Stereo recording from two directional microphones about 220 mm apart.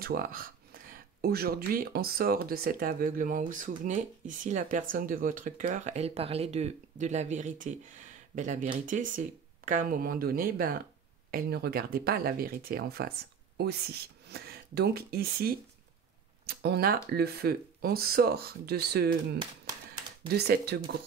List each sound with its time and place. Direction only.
0.0 s speech: 40° right (ahead or behind)
20.2 s speech: 45° right (ahead or behind)